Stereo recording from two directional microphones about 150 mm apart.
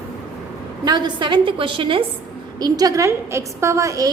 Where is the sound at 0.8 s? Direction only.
30° right (ahead or behind).